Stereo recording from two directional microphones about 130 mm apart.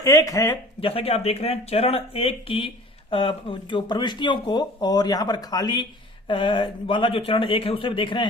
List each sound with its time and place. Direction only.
0.0 s speech: 25° left (ahead or behind)
0.8 s speech: 45° left (ahead or behind)